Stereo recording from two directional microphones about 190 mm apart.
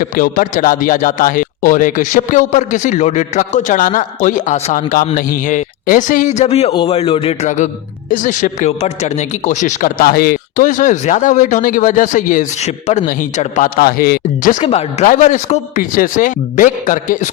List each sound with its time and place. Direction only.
0.0 s speech: 50° left (ahead or behind)
13.7 s speech: 55° left (ahead or behind)
14.6 s speech: 35° left (ahead or behind)